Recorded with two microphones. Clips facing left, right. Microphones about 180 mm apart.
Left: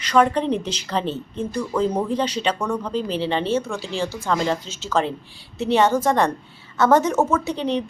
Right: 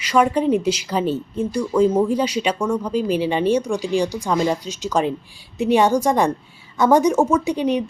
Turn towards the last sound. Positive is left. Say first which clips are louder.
# right 3 dB
turn(degrees=-10)  # may be behind; listen again after turning